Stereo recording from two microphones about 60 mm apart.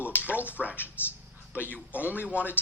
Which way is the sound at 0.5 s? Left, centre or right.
Left.